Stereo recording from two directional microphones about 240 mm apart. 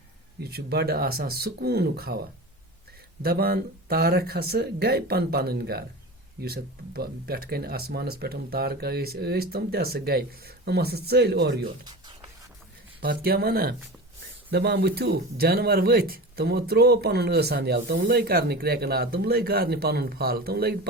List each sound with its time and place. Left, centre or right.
0.3 s speech: right
3.2 s speech: right
11.9 s a sound: centre
13.0 s speech: right